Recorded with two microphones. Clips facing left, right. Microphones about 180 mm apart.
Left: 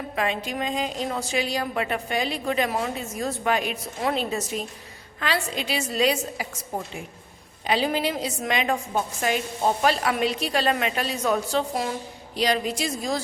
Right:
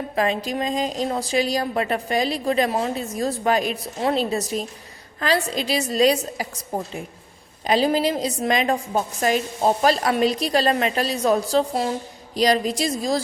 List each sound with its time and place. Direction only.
0.2 s a woman's voice: 35° right (ahead or behind)